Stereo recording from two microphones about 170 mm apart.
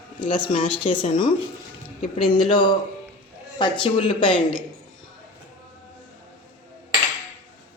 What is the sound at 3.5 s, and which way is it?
Speech, 30° left (ahead or behind).